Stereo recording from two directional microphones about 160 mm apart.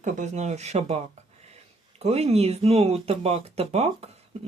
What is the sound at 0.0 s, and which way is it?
Speech, 50° right (ahead or behind).